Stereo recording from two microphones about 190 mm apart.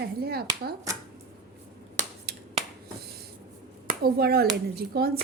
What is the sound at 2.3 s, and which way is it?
Finger snapping, 55° right (ahead or behind).